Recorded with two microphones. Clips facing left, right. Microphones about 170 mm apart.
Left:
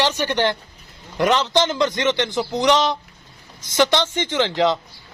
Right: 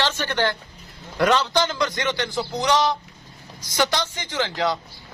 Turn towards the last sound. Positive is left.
turn(degrees=20)  # may be behind; listen again after turning